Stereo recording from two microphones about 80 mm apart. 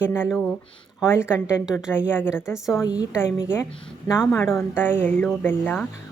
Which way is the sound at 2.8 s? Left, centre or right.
Left.